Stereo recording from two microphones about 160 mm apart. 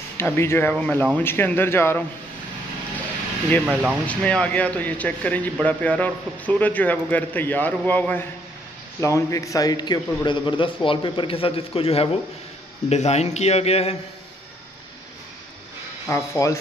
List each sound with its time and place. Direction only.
0.2 s a man's voice: 15° left (ahead or behind)
3.6 s speech: 10° right (ahead or behind)
4.1 s a man's voice: 5° left (ahead or behind); by 13.9 s 40° left (ahead or behind)
16.1 s a man's voice: 20° left (ahead or behind)